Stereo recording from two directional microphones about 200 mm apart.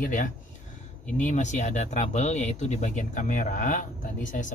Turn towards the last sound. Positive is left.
turn(degrees=40)  # may be behind; listen again after turning